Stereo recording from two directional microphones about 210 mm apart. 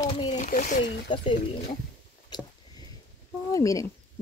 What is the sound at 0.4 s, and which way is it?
Speech, 35° left (ahead or behind).